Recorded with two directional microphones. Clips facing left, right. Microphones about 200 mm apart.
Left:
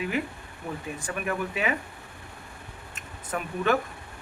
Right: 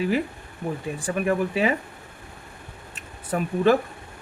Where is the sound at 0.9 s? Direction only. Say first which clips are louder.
Right 8 dB; 30° right (ahead or behind).